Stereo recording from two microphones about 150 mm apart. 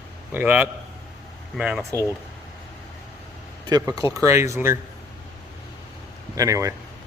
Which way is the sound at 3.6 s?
25° right (ahead or behind).